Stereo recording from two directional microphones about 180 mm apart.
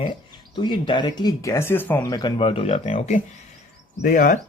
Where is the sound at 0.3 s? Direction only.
25° left (ahead or behind).